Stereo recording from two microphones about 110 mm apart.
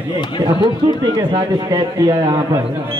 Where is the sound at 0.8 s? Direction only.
40° right (ahead or behind).